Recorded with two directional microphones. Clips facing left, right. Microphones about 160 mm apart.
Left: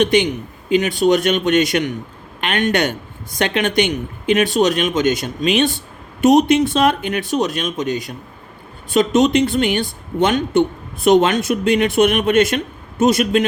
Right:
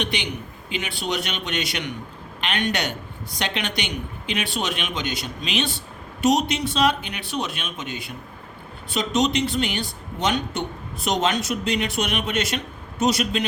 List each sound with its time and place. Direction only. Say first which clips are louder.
0.0 s speech: left 12 dB; 45° left (ahead or behind)
8.9 s speech: left 8 dB; 50° left (ahead or behind)